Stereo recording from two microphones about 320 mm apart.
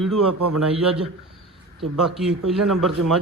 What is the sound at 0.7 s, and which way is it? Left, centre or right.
Speech, centre.